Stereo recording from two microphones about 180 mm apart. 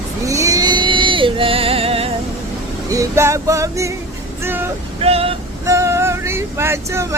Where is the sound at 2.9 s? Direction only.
15° right (ahead or behind).